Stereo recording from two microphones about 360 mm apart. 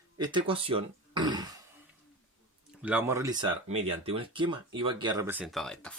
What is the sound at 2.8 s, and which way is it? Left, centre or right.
Speech, centre.